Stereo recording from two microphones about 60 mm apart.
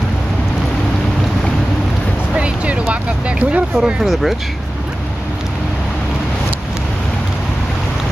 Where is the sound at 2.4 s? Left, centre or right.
Centre.